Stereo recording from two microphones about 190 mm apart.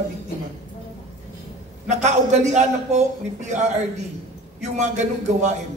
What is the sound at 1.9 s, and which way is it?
A man's voice, 35° right (ahead or behind).